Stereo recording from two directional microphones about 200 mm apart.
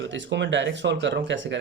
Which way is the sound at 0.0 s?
65° right (ahead or behind).